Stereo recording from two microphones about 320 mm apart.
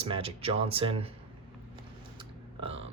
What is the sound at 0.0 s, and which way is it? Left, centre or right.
Speech, centre.